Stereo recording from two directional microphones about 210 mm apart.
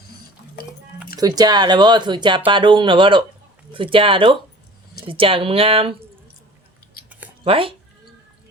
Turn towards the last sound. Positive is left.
turn(degrees=-25)  # may be behind; listen again after turning